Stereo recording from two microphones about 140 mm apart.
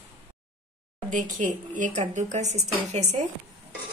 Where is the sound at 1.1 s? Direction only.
65° right (ahead or behind).